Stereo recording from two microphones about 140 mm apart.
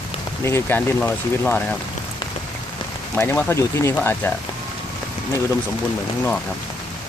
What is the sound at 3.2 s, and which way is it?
Speech, 20° left (ahead or behind).